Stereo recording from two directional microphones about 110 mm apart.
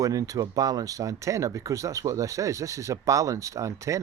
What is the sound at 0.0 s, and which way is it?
Speech, 30° right (ahead or behind).